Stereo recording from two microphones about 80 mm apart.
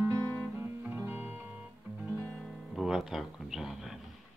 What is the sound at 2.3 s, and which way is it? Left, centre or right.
Music, centre.